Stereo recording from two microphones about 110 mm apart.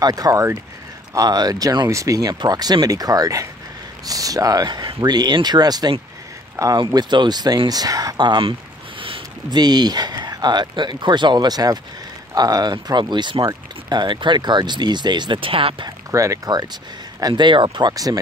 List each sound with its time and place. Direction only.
0.0 s speech: 35° right (ahead or behind)
6.8 s speech: 40° right (ahead or behind)
9.0 s a sound: 55° right (ahead or behind)
9.6 s speech: 40° right (ahead or behind)
16.1 s speech: 30° right (ahead or behind)
17.2 s speech: 45° right (ahead or behind)